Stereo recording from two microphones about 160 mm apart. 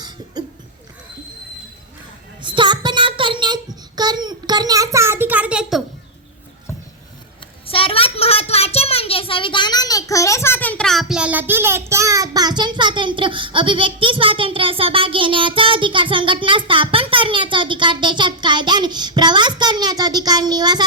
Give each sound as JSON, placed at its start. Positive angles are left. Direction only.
{"t": 2.4, "sound": "child singing", "side_deg": -30}
{"t": 7.7, "sound": "a child's voice", "side_deg": 35}